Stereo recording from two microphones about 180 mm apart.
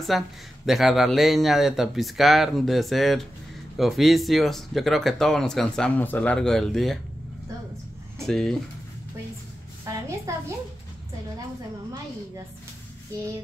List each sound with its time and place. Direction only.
0.1 s speech: centre (ahead or behind)
8.2 s speech: centre (ahead or behind)
9.8 s a sound: 15° right (ahead or behind)